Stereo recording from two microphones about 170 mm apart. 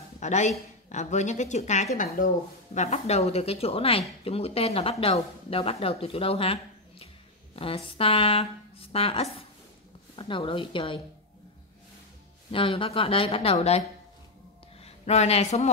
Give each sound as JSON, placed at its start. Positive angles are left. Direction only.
{"t": 0.2, "sound": "a woman's voice", "side_deg": 45}
{"t": 12.4, "sound": "speech", "side_deg": 30}